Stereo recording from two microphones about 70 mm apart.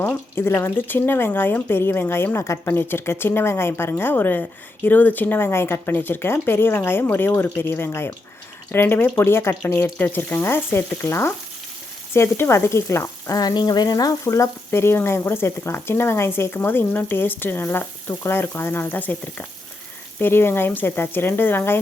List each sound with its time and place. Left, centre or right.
0.0 s speech: left
13.3 s speech: left
14.3 s speech: left